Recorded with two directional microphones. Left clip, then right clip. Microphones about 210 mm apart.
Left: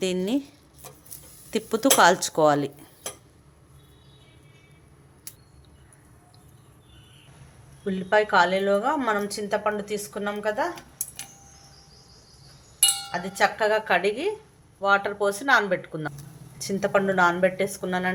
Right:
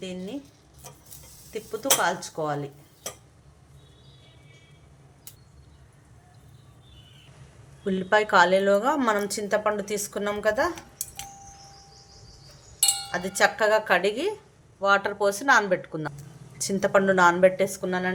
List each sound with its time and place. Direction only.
0.0 s speech: 50° left (ahead or behind)
1.5 s speech: 50° left (ahead or behind)
7.9 s a woman's voice: 15° right (ahead or behind)
13.1 s speech: 20° right (ahead or behind); by 18.1 s centre (ahead or behind)